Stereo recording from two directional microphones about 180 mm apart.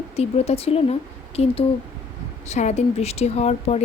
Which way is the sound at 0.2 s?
35° left (ahead or behind).